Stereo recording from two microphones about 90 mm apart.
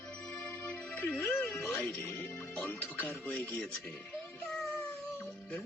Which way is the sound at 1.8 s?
15° left (ahead or behind).